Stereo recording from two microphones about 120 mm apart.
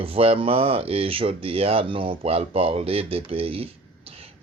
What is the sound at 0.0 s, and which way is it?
Speech, 55° right (ahead or behind).